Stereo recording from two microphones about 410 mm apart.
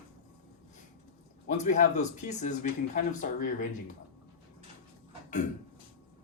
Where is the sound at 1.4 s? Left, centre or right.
Centre.